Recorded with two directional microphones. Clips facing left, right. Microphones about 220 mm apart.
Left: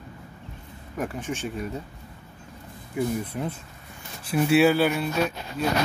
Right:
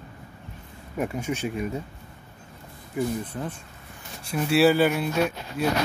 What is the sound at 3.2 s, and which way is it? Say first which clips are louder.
Speech: left 2 dB; 10° left (ahead or behind).